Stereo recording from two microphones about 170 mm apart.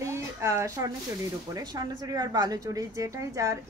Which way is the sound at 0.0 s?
15° right (ahead or behind).